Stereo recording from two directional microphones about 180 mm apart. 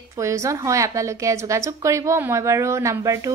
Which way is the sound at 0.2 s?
15° right (ahead or behind).